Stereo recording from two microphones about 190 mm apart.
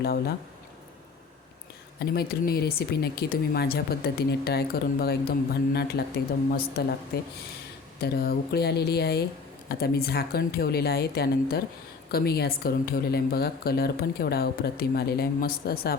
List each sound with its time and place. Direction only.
0.0 s speech: 55° left (ahead or behind)
2.0 s speech: 55° left (ahead or behind)